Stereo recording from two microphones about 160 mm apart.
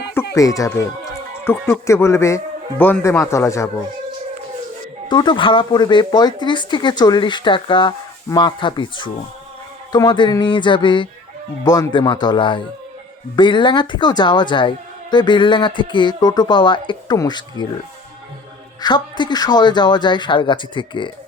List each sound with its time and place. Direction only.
0.3 s speech: 20° left (ahead or behind)
5.0 s a woman's voice: 30° left (ahead or behind)
18.8 s a woman's voice: 30° left (ahead or behind)